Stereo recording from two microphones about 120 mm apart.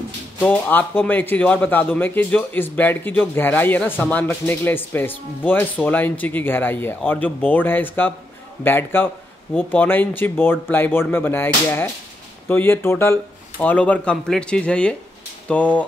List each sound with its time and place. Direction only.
0.4 s a man's voice: 15° left (ahead or behind)